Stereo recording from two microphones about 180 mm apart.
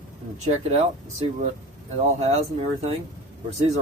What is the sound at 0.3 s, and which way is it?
Speech, 40° right (ahead or behind).